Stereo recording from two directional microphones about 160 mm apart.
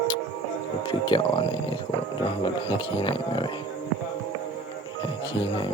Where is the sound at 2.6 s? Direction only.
30° left (ahead or behind).